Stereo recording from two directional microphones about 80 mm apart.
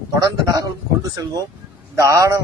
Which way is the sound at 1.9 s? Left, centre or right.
Right.